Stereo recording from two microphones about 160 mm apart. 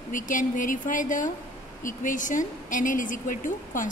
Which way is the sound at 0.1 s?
55° left (ahead or behind).